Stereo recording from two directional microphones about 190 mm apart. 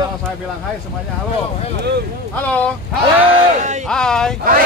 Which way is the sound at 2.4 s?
5° left (ahead or behind).